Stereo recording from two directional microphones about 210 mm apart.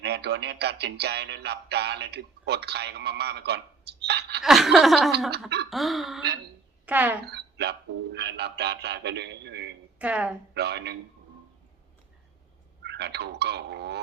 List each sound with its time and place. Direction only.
0.0 s music: 50° right (ahead or behind)
4.4 s laughter: centre (ahead or behind)
6.8 s speech: 10° right (ahead or behind)
7.3 s music: 55° right (ahead or behind)
10.0 s laughter: 5° right (ahead or behind)
10.5 s music: 55° right (ahead or behind)
12.8 s music: 55° right (ahead or behind)